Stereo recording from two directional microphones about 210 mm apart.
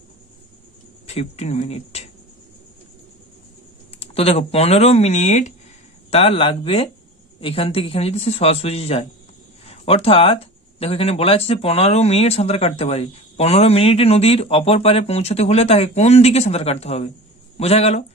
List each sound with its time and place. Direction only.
1.0 s speech: 30° left (ahead or behind)
4.0 s speech: 30° left (ahead or behind)